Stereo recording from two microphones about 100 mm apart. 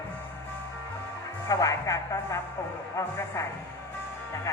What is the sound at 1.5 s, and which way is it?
Speech, 35° left (ahead or behind).